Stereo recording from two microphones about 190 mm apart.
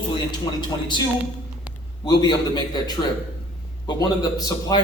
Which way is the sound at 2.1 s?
20° left (ahead or behind).